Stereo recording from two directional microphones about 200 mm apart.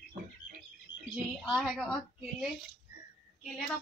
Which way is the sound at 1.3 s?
Centre (ahead or behind).